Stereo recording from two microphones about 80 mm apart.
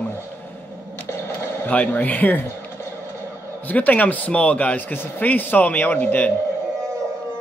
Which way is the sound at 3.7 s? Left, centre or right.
Centre.